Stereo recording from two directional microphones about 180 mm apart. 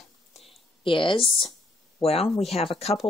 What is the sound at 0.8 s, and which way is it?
Speech, 30° left (ahead or behind).